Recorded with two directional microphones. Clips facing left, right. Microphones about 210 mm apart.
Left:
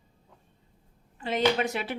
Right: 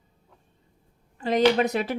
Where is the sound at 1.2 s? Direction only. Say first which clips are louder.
Right 5 dB; 40° right (ahead or behind).